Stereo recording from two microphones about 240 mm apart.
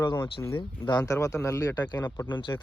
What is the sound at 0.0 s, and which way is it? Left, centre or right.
Speech, centre.